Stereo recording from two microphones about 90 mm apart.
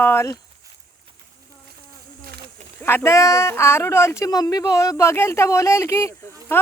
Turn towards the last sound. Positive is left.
turn(degrees=25)  # may be behind; listen again after turning